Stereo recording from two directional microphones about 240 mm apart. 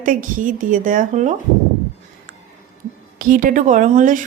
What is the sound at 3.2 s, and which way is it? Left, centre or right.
A woman's voice, right.